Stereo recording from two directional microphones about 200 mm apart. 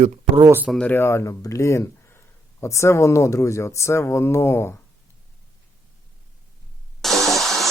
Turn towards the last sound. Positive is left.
turn(degrees=0)  # may be behind; listen again after turning